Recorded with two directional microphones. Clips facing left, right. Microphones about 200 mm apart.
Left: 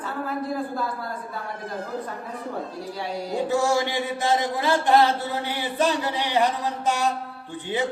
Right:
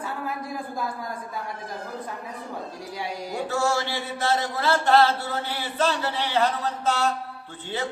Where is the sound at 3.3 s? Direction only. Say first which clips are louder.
Left 3 dB; 15° left (ahead or behind).